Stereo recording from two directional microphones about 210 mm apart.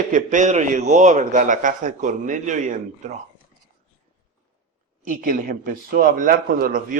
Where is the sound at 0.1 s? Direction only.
35° right (ahead or behind).